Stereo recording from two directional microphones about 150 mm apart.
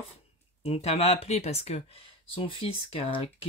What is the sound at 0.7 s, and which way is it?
Speech, 45° left (ahead or behind).